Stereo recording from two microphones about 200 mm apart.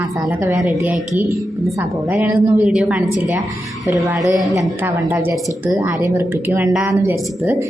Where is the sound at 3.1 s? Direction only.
20° left (ahead or behind).